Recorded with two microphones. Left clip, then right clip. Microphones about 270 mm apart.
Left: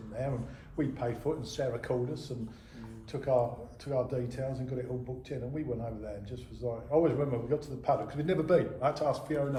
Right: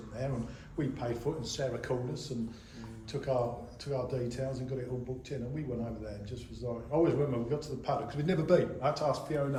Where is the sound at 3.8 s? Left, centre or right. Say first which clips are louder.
Left 3 dB; left.